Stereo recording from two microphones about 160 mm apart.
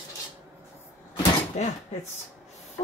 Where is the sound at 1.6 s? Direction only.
45° left (ahead or behind).